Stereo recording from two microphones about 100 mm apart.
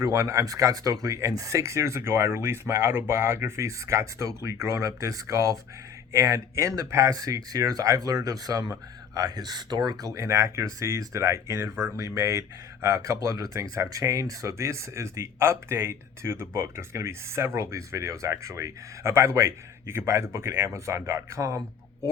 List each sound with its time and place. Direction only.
0.0 s speech: 30° right (ahead or behind)